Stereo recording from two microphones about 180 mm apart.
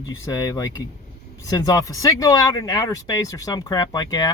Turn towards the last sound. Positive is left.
turn(degrees=20)  # may be behind; listen again after turning